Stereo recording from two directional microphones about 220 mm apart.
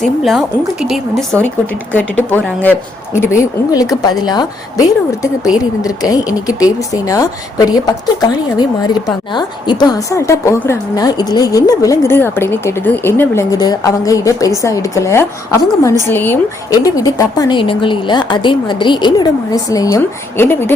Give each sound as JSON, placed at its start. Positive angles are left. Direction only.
{"t": 0.0, "sound": "a woman's voice", "side_deg": 0}